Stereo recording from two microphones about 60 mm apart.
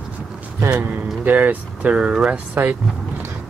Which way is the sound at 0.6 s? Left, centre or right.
Right.